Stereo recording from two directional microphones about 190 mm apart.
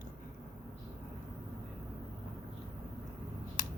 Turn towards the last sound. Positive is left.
turn(degrees=45)  # may be behind; listen again after turning